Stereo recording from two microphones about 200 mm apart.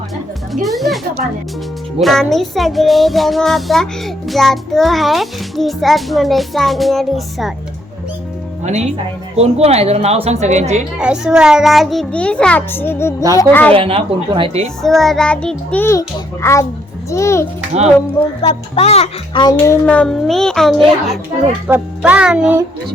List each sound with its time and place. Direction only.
0.5 s music: centre (ahead or behind)
2.0 s a child's voice: centre (ahead or behind)
8.6 s speech: 35° right (ahead or behind)
10.9 s a child's voice: 5° right (ahead or behind)
13.7 s speech: 25° right (ahead or behind)
14.8 s a child's voice: centre (ahead or behind)
18.4 s a child's voice: 30° left (ahead or behind)
19.8 s a child's voice: 5° left (ahead or behind)